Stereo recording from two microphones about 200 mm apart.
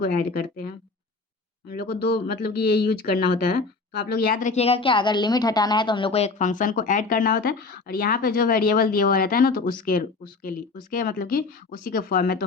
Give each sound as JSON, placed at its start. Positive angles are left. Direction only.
{"t": 0.0, "sound": "speech", "side_deg": 50}
{"t": 1.7, "sound": "speech", "side_deg": 50}